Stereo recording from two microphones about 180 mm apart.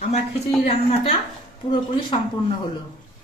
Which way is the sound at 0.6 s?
35° left (ahead or behind).